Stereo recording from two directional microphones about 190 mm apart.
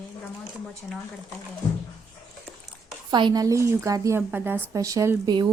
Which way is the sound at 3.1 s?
25° right (ahead or behind).